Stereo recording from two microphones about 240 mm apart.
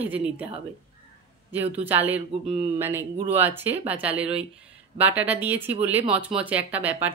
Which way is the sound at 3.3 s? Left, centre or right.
Centre.